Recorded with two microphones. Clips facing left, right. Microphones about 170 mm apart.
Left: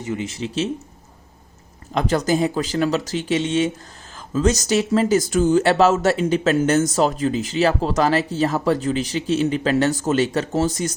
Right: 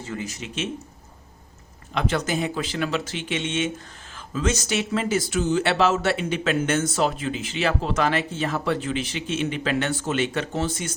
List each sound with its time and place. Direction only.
0.0 s speech: 20° left (ahead or behind)
1.9 s speech: 40° left (ahead or behind)